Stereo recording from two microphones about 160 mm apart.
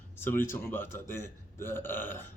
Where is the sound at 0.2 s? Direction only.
15° left (ahead or behind).